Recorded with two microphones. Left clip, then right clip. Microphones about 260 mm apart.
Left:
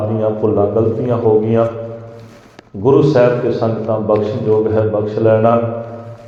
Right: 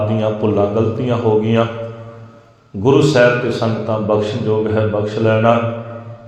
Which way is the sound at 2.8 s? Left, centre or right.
Right.